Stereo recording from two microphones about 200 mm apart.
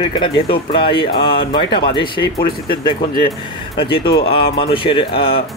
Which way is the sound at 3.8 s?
25° left (ahead or behind).